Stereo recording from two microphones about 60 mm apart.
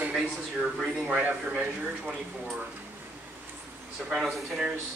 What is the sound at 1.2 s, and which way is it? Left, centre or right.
Speech, right.